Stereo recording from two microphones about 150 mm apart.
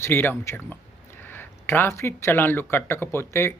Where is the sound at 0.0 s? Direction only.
15° left (ahead or behind).